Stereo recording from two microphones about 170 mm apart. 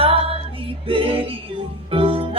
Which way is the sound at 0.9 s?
30° right (ahead or behind).